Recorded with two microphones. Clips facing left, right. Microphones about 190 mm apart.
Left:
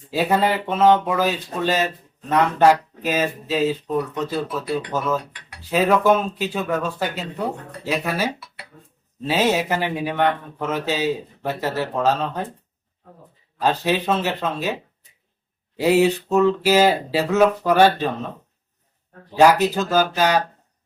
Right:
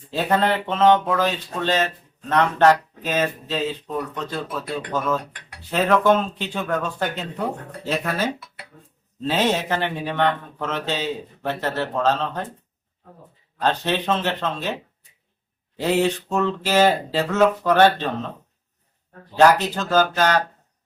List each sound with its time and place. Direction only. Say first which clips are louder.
0.1 s speech: left 1 dB; 10° left (ahead or behind)
4.4 s speech: left 4 dB; 50° right (ahead or behind)
4.9 s speech: right 3 dB; 5° left (ahead or behind)
5.2 s speech: right 1 dB; 50° right (ahead or behind)
5.7 s speech: left 1 dB; 10° left (ahead or behind)
13.6 s speech: left 2 dB; 10° left (ahead or behind)
15.8 s speech: left 4 dB; 10° left (ahead or behind)
19.4 s speech: left 1 dB; 10° left (ahead or behind)